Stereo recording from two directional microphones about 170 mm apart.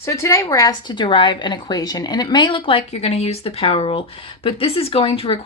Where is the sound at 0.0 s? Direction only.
20° left (ahead or behind).